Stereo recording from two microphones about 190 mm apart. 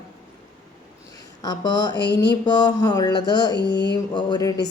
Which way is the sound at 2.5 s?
20° left (ahead or behind).